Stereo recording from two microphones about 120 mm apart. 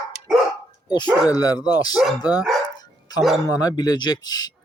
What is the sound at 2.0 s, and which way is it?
Speech, centre (ahead or behind).